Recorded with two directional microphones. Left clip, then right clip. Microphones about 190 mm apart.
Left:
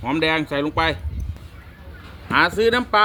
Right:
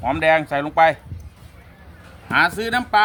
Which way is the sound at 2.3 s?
30° right (ahead or behind).